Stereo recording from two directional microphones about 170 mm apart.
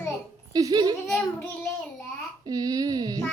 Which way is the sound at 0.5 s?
25° right (ahead or behind).